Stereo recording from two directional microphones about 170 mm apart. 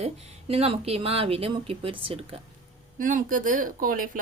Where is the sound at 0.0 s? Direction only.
35° right (ahead or behind).